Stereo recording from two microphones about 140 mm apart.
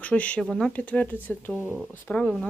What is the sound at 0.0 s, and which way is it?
Speech, 10° left (ahead or behind).